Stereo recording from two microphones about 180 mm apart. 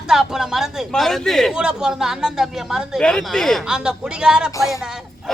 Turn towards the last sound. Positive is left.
turn(degrees=-5)  # may be behind; listen again after turning